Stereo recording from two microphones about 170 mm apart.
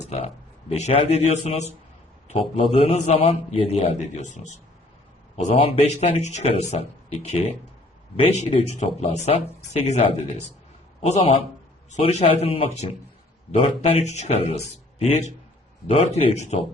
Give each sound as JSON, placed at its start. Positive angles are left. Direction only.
{"t": 0.0, "sound": "a man's voice", "side_deg": 40}
{"t": 5.5, "sound": "speech", "side_deg": 30}